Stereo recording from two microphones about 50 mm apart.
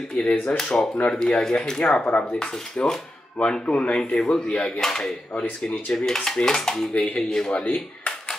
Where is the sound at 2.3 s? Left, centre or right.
Centre.